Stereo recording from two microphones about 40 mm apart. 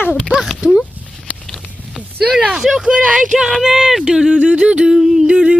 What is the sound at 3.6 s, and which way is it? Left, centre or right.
Speech, centre.